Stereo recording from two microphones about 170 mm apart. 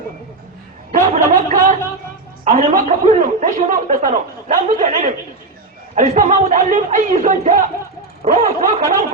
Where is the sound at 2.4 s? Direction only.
50° right (ahead or behind).